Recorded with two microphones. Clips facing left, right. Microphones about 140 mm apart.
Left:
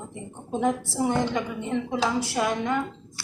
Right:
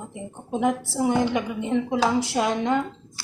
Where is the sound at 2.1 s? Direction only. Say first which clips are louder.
Right 2 dB; 20° right (ahead or behind).